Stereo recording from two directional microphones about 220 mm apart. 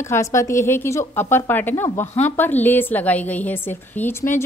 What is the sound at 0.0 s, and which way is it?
A woman's voice, 10° left (ahead or behind).